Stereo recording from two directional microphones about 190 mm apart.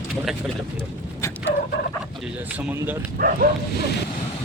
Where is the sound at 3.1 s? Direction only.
50° right (ahead or behind).